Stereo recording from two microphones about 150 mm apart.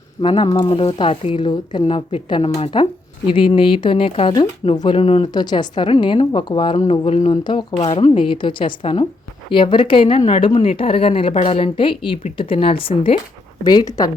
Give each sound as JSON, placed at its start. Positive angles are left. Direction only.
{"t": 0.2, "sound": "a woman's voice", "side_deg": 35}
{"t": 5.3, "sound": "a woman's voice", "side_deg": 30}
{"t": 13.7, "sound": "a woman's voice", "side_deg": 25}